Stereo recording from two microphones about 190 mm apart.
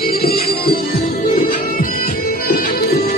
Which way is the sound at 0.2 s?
55° left (ahead or behind).